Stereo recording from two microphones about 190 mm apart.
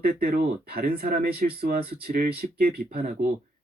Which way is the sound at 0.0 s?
50° right (ahead or behind).